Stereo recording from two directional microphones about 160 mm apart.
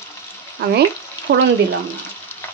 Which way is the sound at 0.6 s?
85° right.